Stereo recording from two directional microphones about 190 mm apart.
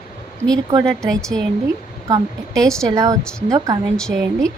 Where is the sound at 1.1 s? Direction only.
5° left (ahead or behind).